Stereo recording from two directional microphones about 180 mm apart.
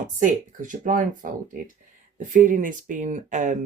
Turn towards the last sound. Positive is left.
turn(degrees=-45)  # may be behind; listen again after turning